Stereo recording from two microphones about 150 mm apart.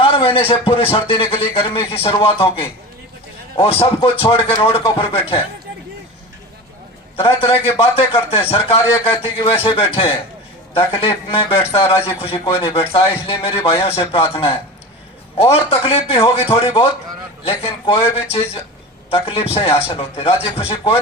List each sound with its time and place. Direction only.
0.0 s a man's voice: 35° left (ahead or behind)
7.2 s a man's voice: 40° left (ahead or behind)